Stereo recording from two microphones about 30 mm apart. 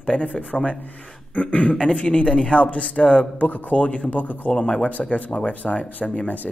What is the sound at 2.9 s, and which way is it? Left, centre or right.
Speech, left.